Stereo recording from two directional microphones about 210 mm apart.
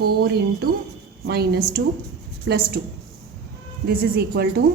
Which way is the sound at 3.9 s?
50° right (ahead or behind).